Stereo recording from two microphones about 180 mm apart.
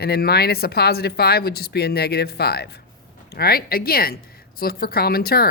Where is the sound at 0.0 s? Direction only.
60° left (ahead or behind).